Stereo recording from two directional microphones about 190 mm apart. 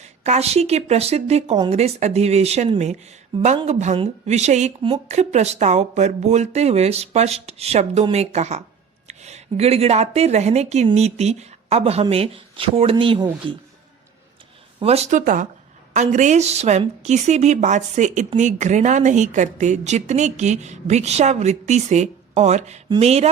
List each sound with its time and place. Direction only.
0.0 s a woman's voice: 35° right (ahead or behind)
14.8 s a woman's voice: 30° right (ahead or behind)
15.2 s a woman's voice: 45° right (ahead or behind)